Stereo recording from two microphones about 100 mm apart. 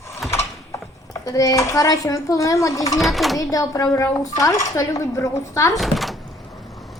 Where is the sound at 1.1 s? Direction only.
35° left (ahead or behind).